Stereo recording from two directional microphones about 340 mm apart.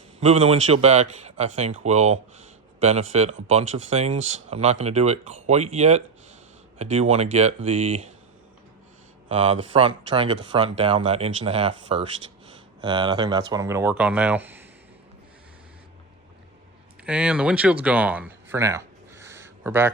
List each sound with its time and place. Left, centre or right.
0.2 s speech: centre
9.3 s speech: centre
17.1 s speech: centre